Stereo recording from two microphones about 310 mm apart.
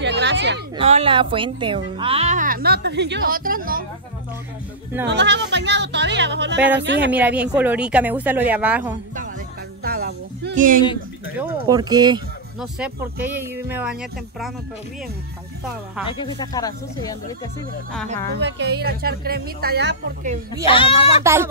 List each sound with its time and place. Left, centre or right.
0.0 s a sound: right
0.7 s speech: centre
5.0 s speech: right
7.1 s a woman's voice: centre
9.8 s a sound: right
11.3 s speech: centre
12.5 s a woman's voice: centre
16.1 s speech: centre
18.4 s speech: right
20.6 s speech: centre
21.2 s speech: centre